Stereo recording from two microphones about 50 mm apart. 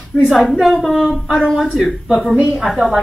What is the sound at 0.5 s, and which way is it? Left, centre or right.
A man's voice, centre.